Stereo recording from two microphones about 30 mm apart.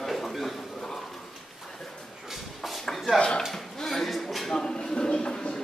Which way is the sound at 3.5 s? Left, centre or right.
Centre.